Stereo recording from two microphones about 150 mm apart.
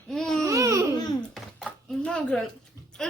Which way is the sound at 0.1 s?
5° left (ahead or behind).